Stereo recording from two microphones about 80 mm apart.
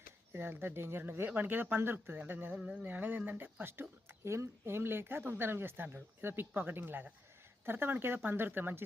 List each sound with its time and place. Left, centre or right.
0.3 s speech: right
2.6 s speech: centre
2.8 s speech: right